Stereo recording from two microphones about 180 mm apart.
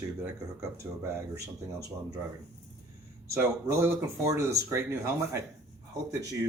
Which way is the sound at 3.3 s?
15° right (ahead or behind).